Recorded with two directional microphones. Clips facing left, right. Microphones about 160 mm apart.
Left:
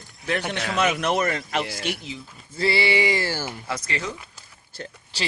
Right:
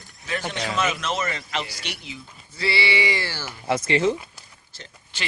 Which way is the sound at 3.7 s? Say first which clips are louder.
Right 12 dB; 25° right (ahead or behind).